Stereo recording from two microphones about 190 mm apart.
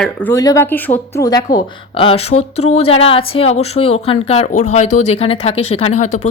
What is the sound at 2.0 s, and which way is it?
Speech, 30° left (ahead or behind).